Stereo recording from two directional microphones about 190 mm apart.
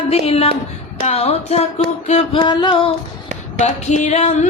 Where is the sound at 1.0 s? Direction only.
35° left (ahead or behind).